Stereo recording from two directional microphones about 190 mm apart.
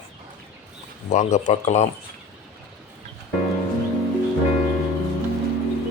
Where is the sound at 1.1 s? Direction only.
40° left (ahead or behind).